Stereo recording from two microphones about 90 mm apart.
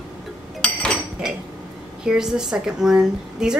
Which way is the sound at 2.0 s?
5° right (ahead or behind).